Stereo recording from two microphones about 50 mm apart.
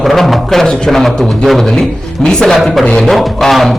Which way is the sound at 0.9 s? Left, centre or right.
Centre.